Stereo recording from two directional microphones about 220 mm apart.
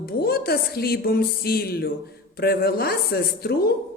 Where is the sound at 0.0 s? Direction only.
45° left (ahead or behind).